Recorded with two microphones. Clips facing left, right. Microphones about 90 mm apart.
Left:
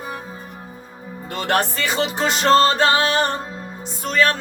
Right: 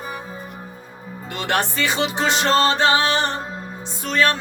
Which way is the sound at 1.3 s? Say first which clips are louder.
Left 2 dB; 40° left (ahead or behind).